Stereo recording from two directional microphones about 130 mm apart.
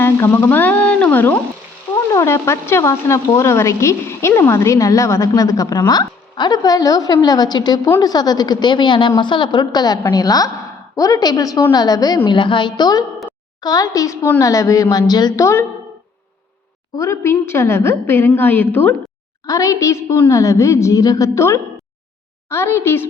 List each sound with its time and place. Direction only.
0.0 s a woman's voice: 15° left (ahead or behind)
17.0 s a woman's voice: 20° left (ahead or behind)